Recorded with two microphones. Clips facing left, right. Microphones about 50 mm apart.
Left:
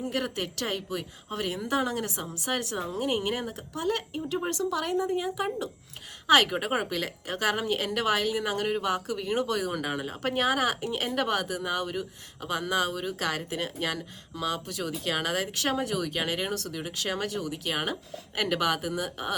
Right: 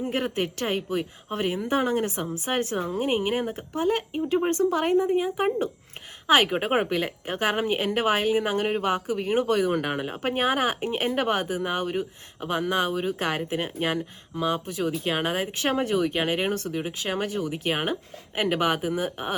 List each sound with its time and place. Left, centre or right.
0.0 s speech: right
4.9 s speech: centre